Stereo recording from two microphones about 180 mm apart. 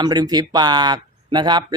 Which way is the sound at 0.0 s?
20° right (ahead or behind).